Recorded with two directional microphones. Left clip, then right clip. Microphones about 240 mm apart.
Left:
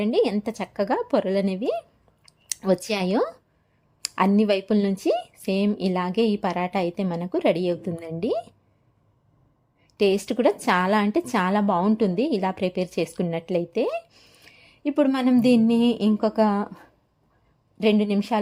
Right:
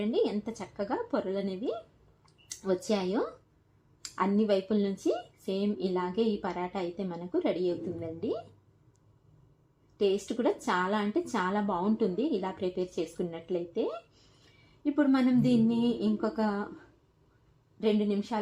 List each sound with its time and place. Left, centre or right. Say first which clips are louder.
0.0 s speech: left 7 dB; left
10.0 s speech: left 8 dB; left
17.7 s speech: left 7 dB; left